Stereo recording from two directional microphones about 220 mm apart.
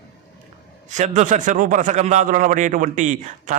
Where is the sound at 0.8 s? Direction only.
35° right (ahead or behind).